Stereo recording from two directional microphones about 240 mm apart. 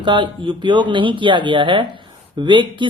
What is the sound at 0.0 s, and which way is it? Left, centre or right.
Speech, centre.